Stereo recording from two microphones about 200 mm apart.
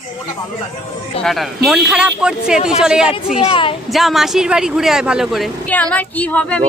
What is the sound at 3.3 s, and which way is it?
Speech, 25° left (ahead or behind).